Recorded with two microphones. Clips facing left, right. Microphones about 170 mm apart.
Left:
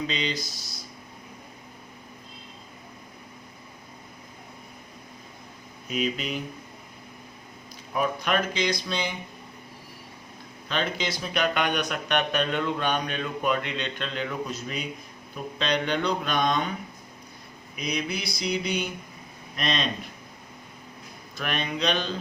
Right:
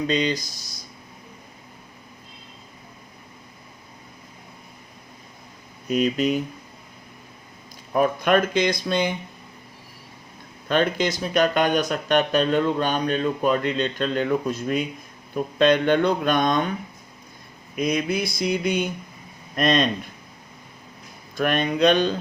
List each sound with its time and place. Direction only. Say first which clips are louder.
0.1 s speech: right 7 dB; 45° right (ahead or behind)
5.9 s speech: right 8 dB; 45° right (ahead or behind)
7.9 s speech: right 7 dB; 50° right (ahead or behind)
10.7 s speech: right 7 dB; 50° right (ahead or behind)
17.7 s speech: right 8 dB; 50° right (ahead or behind)
21.3 s speech: right 8 dB; 50° right (ahead or behind)